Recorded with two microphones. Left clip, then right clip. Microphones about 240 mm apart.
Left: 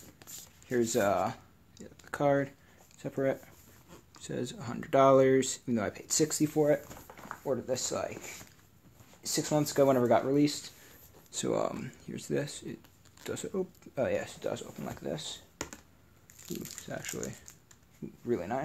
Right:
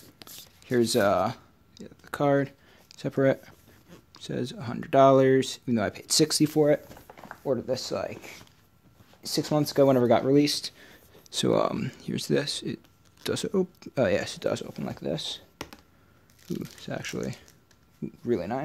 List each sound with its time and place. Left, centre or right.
0.2 s a sound: right
3.0 s speech: right
4.1 s speech: right
15.5 s computer keyboard: centre
16.4 s speech: centre
16.8 s speech: right
18.2 s speech: right